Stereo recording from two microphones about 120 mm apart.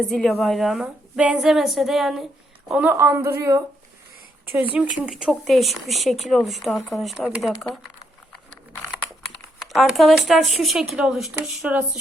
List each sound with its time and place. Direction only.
0.0 s speech: 5° left (ahead or behind); by 3.6 s 25° right (ahead or behind)
4.5 s speech: 10° right (ahead or behind)
9.6 s speech: centre (ahead or behind)